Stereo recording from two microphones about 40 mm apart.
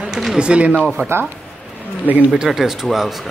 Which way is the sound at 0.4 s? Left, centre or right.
Right.